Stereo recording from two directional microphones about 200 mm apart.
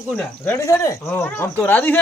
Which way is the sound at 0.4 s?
15° left (ahead or behind).